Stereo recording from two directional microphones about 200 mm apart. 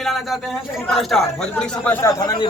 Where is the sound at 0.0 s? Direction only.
Centre (ahead or behind).